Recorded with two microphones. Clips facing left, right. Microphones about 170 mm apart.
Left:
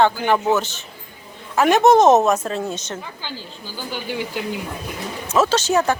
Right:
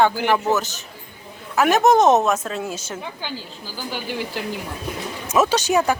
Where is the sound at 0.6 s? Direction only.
40° right (ahead or behind).